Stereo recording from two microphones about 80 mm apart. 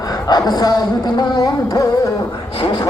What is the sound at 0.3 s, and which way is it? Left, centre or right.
Carnatic music, left.